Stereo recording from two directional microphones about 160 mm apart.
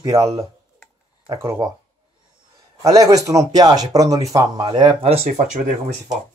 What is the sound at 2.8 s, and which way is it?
Speech, 20° right (ahead or behind).